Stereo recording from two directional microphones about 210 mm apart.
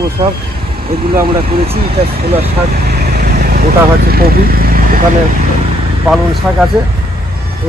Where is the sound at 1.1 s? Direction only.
45° right (ahead or behind).